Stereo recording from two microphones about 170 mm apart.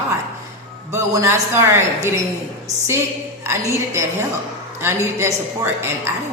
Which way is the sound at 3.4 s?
15° right (ahead or behind).